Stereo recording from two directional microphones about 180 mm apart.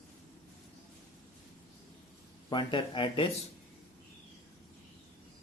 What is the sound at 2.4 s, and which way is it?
Speech, 25° left (ahead or behind).